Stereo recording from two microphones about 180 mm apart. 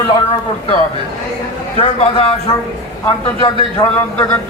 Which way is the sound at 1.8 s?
35° left (ahead or behind).